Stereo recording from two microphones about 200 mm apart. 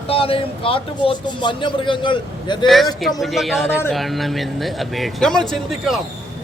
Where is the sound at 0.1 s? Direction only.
30° left (ahead or behind).